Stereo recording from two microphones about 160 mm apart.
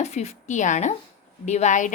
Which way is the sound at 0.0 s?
45° left (ahead or behind).